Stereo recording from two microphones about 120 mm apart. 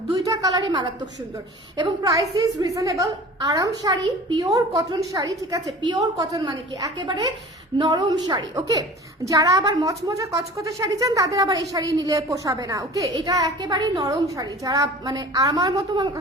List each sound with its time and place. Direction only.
0.3 s a woman's voice: 35° right (ahead or behind)